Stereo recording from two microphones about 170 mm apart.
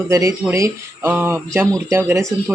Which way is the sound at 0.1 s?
20° right (ahead or behind).